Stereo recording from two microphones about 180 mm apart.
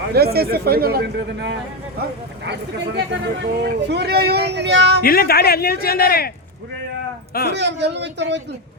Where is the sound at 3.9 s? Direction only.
65° right (ahead or behind).